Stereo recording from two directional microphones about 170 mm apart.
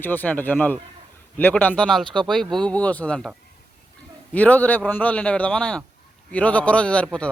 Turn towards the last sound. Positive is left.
turn(degrees=5)  # may be behind; listen again after turning